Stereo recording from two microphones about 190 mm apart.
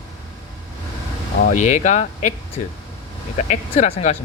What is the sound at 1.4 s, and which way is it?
Speech, 45° left (ahead or behind).